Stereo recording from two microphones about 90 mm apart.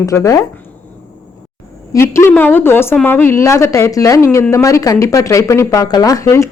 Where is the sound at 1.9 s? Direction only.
30° left (ahead or behind).